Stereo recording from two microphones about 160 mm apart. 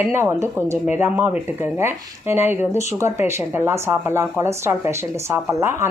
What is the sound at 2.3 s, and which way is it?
Speech, 15° right (ahead or behind).